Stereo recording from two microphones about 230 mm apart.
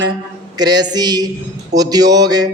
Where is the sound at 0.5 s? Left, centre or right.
Centre.